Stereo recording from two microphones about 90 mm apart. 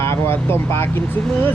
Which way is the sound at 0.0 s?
30° left (ahead or behind).